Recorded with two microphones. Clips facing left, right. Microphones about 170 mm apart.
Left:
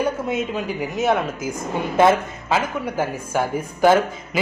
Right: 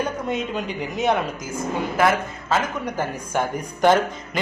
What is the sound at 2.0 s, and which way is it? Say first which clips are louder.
Speech: left 5 dB; 25° left (ahead or behind).